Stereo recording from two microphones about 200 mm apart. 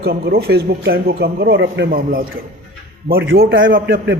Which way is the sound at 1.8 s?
45° right (ahead or behind).